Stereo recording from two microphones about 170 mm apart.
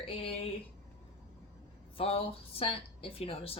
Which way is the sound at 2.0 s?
35° left (ahead or behind).